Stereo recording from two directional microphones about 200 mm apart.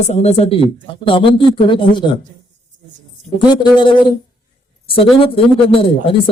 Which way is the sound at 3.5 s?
25° left (ahead or behind).